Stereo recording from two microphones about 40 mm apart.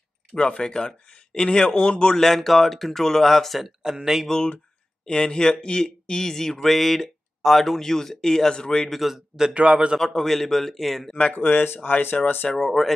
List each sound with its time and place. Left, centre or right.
0.4 s speech: left
2.1 s speech: centre
3.6 s speech: centre
5.0 s speech: centre
8.9 s speech: centre
9.5 s speech: right
9.9 s speech: centre
11.3 s speech: left
12.5 s speech: centre